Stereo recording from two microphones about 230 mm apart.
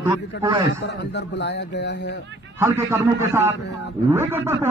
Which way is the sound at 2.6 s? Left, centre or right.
Centre.